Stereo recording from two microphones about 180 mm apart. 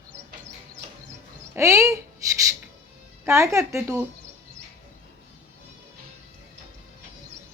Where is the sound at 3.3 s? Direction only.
15° right (ahead or behind).